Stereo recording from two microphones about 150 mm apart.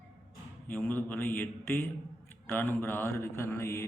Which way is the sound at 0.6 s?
10° left (ahead or behind).